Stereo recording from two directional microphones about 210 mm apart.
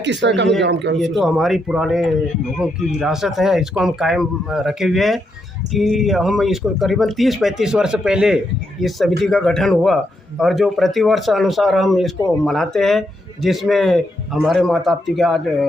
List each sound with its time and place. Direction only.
0.0 s speech: 55° right (ahead or behind)
0.9 s a man's voice: centre (ahead or behind)